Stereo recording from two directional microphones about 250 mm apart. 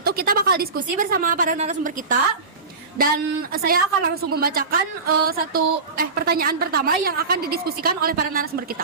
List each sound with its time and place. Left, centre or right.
0.0 s a woman's voice: right
3.5 s a woman's voice: right